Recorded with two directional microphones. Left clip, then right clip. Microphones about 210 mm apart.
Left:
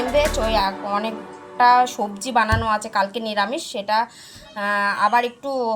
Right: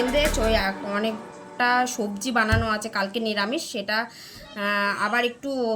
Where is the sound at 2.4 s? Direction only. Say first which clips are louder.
Left 4 dB; 5° left (ahead or behind).